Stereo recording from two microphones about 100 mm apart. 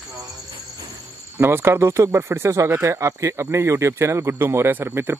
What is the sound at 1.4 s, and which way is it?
Speech, 25° right (ahead or behind).